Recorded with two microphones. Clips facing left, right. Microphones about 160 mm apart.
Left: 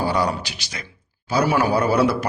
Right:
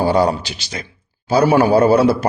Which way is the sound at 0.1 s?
25° right (ahead or behind).